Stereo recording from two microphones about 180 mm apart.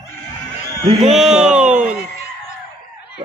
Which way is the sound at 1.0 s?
Centre (ahead or behind).